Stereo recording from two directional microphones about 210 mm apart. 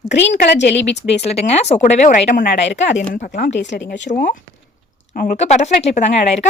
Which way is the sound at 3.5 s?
55° left (ahead or behind).